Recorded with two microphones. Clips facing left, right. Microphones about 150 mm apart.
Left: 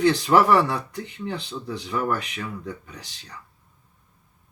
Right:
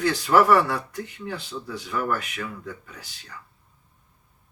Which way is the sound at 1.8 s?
30° left (ahead or behind).